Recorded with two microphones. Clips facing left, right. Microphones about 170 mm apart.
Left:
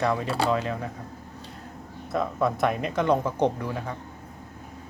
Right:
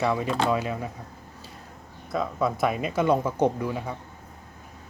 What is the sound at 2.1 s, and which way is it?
Speech, centre (ahead or behind).